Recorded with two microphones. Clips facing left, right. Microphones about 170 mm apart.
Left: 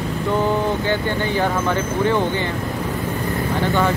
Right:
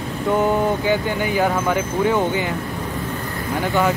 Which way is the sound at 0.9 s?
10° right (ahead or behind).